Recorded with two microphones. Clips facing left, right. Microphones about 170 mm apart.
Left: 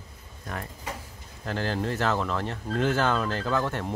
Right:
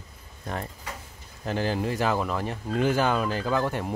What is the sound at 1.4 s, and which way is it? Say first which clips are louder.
Speech: right 2 dB; 15° right (ahead or behind).